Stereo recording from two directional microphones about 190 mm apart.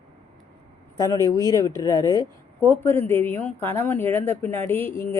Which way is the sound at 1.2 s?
15° left (ahead or behind).